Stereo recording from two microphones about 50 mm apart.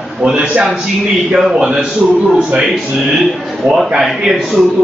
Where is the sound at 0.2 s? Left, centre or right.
Right.